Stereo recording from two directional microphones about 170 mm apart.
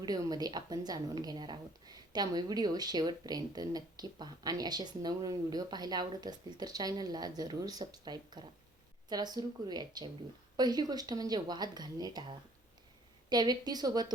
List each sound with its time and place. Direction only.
0.0 s a woman's voice: 20° right (ahead or behind)
13.3 s a woman's voice: 25° right (ahead or behind)